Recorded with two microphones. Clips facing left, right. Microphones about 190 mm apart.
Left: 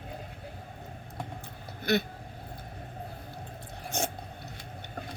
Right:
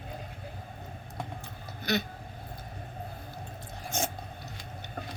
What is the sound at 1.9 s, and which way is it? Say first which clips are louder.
Speech: left 3 dB; 55° left (ahead or behind).